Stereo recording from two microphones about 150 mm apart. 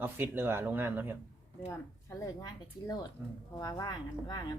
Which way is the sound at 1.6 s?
20° left (ahead or behind).